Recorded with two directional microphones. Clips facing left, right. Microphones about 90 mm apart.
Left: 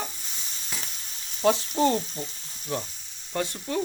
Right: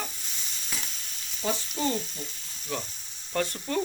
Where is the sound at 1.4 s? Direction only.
70° left (ahead or behind).